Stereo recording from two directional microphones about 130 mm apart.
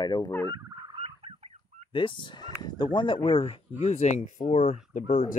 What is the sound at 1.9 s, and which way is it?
Speech, 40° left (ahead or behind).